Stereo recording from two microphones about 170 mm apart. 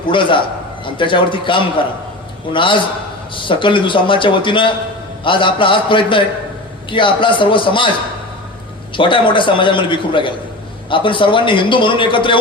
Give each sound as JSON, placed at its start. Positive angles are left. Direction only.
{"t": 0.1, "sound": "a man's voice", "side_deg": 30}
{"t": 9.0, "sound": "a man's voice", "side_deg": 30}